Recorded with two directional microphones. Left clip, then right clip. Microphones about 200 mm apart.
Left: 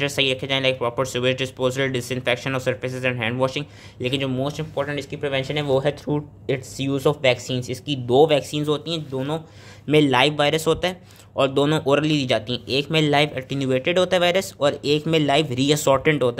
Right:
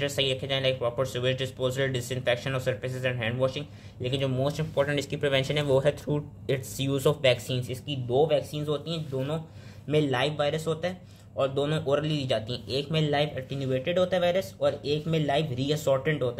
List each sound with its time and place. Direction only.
0.0 s speech: 25° left (ahead or behind)
4.4 s speech: 10° left (ahead or behind)
4.8 s a man's voice: 5° right (ahead or behind); by 16.3 s 40° left (ahead or behind)